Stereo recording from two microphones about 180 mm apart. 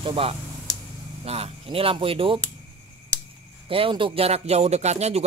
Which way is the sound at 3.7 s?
30° right (ahead or behind).